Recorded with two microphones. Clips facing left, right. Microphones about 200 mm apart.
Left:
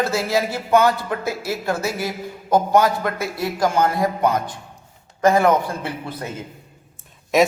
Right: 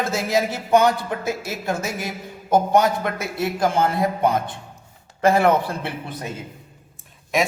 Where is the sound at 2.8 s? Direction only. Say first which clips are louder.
Left 1 dB; 20° right (ahead or behind).